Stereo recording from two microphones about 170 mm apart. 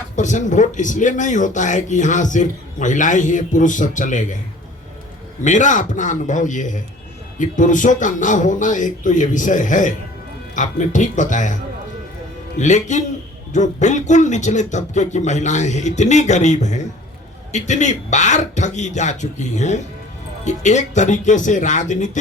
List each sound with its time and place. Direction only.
0.2 s speech: 45° left (ahead or behind)
5.4 s speech: 45° left (ahead or behind)